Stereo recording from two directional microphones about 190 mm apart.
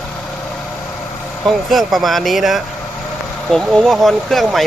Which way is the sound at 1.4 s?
Centre (ahead or behind).